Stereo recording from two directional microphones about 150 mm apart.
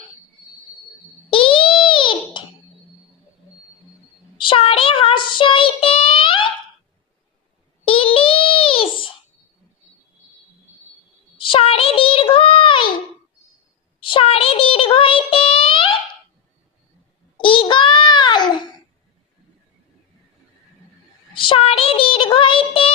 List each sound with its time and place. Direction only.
1.3 s a sound: 35° left (ahead or behind)
4.4 s child singing: 35° left (ahead or behind)
7.9 s child singing: 35° left (ahead or behind)
11.3 s child singing: 35° left (ahead or behind)
14.0 s child singing: 35° left (ahead or behind)
17.3 s babbling: 35° left (ahead or behind)
21.3 s child singing: 35° left (ahead or behind)